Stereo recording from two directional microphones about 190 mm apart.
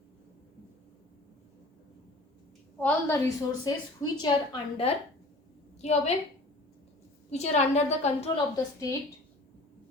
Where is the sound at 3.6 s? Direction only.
20° left (ahead or behind).